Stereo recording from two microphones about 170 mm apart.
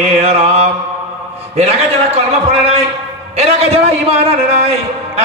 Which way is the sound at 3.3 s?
35° right (ahead or behind).